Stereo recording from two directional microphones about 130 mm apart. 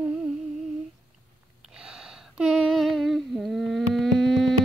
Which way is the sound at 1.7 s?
5° right (ahead or behind).